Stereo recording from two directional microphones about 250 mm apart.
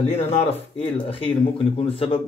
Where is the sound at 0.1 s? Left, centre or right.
Left.